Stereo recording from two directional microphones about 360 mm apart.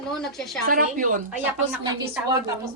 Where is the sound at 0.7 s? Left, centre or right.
Right.